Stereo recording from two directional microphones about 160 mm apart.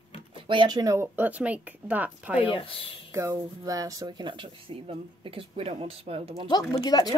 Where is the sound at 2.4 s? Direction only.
35° left (ahead or behind).